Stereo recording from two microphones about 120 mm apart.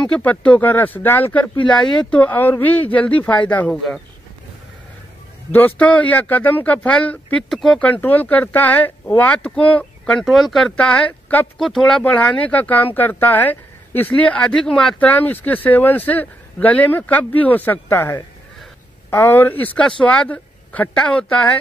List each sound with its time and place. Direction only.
0.0 s speech: 10° left (ahead or behind)
5.5 s speech: 15° left (ahead or behind)
7.9 s speech: 15° left (ahead or behind)
11.5 s speech: centre (ahead or behind)